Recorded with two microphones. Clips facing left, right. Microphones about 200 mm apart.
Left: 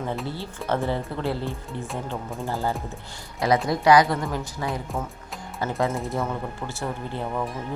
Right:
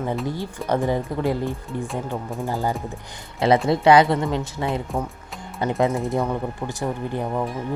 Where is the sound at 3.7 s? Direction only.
25° right (ahead or behind).